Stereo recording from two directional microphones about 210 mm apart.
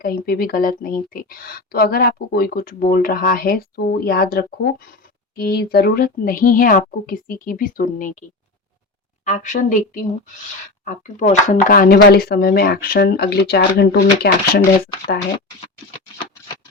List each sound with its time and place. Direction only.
0.0 s speech: 45° left (ahead or behind)
9.2 s speech: 35° left (ahead or behind); by 14.6 s 50° left (ahead or behind)